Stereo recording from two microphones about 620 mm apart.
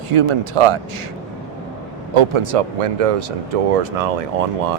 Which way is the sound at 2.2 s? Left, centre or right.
Right.